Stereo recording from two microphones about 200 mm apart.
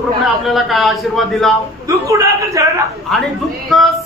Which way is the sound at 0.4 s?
Centre (ahead or behind).